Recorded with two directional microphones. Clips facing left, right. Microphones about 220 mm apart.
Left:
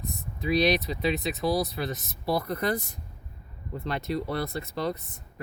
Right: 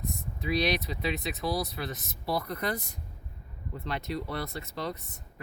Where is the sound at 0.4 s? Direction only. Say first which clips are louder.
Left 5 dB; 30° left (ahead or behind).